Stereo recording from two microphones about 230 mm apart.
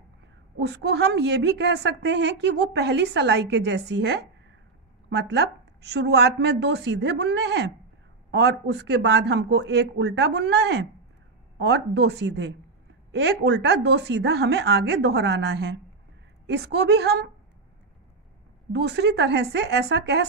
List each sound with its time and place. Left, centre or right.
0.6 s a woman's voice: right
18.7 s a woman's voice: right